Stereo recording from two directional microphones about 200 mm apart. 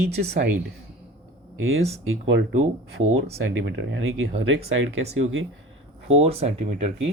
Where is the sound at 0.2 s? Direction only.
55° right (ahead or behind).